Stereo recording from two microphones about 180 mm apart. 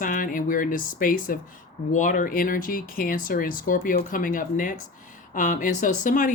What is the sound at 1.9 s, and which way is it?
Speech, 45° left (ahead or behind).